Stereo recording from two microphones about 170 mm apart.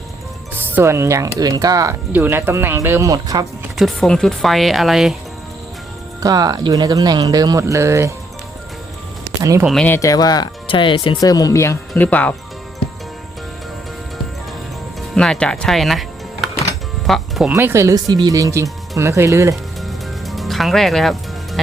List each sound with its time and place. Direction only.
0.6 s speech: 15° right (ahead or behind)
3.8 s speech: centre (ahead or behind)
6.1 s speech: 20° right (ahead or behind)
9.4 s speech: 20° right (ahead or behind)
9.6 s speech: 5° left (ahead or behind)
15.1 s speech: 5° left (ahead or behind)
17.1 s speech: centre (ahead or behind)
17.5 s speech: 15° right (ahead or behind)
19.8 s music: centre (ahead or behind)